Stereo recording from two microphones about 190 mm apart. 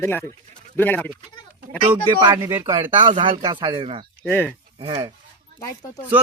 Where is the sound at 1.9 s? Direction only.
15° right (ahead or behind).